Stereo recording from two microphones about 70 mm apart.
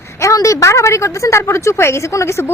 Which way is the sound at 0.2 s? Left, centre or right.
Left.